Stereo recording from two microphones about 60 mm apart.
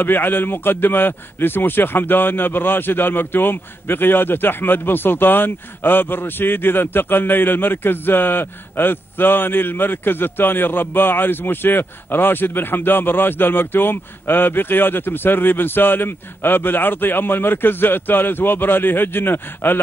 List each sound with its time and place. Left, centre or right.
0.0 s a man's voice: left